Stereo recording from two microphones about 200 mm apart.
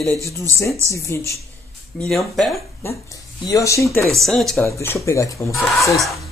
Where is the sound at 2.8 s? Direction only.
15° left (ahead or behind).